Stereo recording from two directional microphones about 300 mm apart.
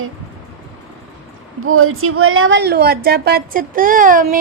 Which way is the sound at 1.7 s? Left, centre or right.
Right.